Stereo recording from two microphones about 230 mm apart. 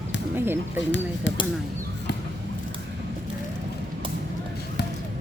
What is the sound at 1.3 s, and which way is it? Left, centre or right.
Speech, left.